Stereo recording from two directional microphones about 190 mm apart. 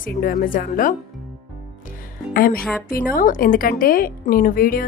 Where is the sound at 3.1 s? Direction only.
45° left (ahead or behind).